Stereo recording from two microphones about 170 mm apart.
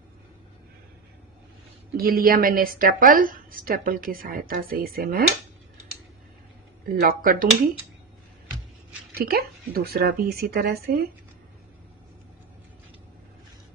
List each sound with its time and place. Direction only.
2.0 s a woman's voice: 60° right (ahead or behind)
6.8 s a woman's voice: 55° right (ahead or behind)
9.1 s a woman's voice: 60° right (ahead or behind)